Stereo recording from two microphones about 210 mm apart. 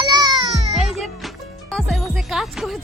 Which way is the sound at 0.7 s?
Centre (ahead or behind).